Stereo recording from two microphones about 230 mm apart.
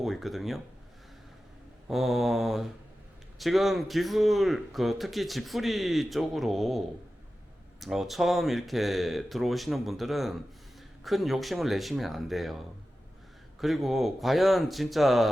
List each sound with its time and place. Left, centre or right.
0.0 s a man's voice: centre
1.9 s a man's voice: centre